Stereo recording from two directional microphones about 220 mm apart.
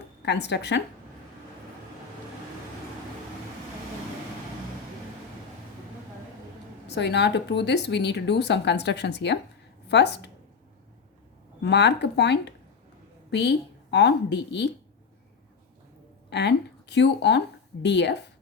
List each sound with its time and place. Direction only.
0.2 s speech: 50° left (ahead or behind)
6.8 s speech: 50° left (ahead or behind)
11.6 s speech: 50° left (ahead or behind)
16.3 s speech: 50° left (ahead or behind)